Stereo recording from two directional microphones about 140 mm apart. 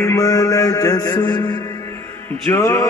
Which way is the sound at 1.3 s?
30° left (ahead or behind).